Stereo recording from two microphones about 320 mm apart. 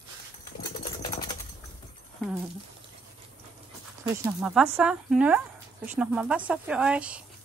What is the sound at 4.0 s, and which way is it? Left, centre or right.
Speech, centre.